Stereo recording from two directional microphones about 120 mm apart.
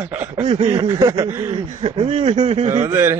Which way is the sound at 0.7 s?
30° right (ahead or behind).